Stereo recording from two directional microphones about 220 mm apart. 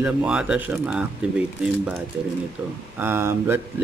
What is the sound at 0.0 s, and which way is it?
Speech, 5° right (ahead or behind).